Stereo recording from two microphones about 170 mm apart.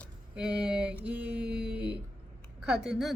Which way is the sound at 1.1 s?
80° right.